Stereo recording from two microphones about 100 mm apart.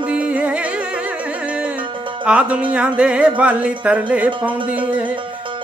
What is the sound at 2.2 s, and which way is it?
Music, 10° right (ahead or behind).